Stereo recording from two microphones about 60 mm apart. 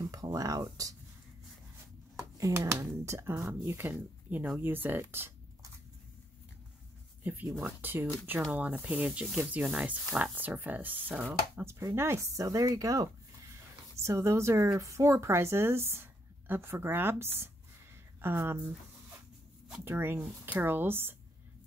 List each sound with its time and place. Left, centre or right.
0.0 s speech: right
2.1 s speech: right
3.9 s speech: right
7.5 s speech: right
8.5 s speech: right
11.6 s a woman's voice: right
12.4 s speech: right
13.9 s a woman's voice: right
19.8 s speech: right
20.2 s speech: right
20.6 s speech: right